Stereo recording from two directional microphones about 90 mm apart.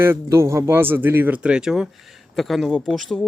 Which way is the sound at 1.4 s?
10° right (ahead or behind).